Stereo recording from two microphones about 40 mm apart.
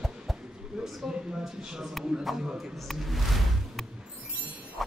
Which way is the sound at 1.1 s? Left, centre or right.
Centre.